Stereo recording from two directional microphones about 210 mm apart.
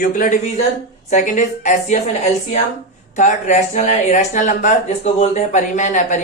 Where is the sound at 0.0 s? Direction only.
40° left (ahead or behind).